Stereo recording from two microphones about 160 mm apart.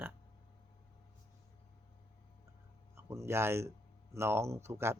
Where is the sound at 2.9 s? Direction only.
15° right (ahead or behind).